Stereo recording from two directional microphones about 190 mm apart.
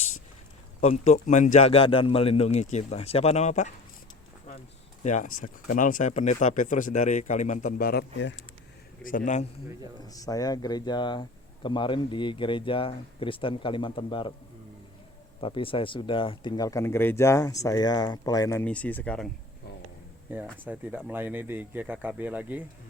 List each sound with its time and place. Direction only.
0.8 s speech: 35° left (ahead or behind)
5.0 s speech: 40° left (ahead or behind)
10.1 s speech: 20° left (ahead or behind)
15.4 s speech: 30° left (ahead or behind); by 19.3 s 5° left (ahead or behind)
20.7 s speech: 5° right (ahead or behind)